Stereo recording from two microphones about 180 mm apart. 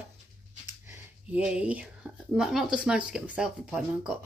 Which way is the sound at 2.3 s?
Centre (ahead or behind).